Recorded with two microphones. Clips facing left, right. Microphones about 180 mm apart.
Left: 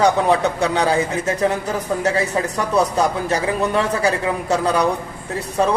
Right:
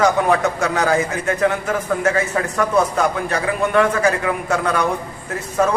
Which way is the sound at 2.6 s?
35° left (ahead or behind).